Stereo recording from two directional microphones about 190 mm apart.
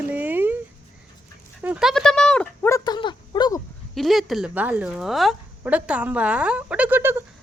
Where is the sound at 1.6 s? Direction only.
5° right (ahead or behind).